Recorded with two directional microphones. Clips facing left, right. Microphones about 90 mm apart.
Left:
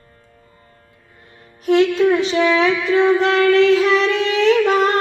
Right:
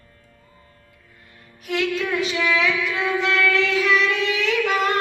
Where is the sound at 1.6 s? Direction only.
35° left (ahead or behind).